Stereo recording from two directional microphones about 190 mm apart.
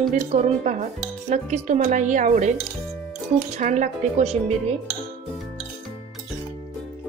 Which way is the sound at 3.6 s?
40° right (ahead or behind).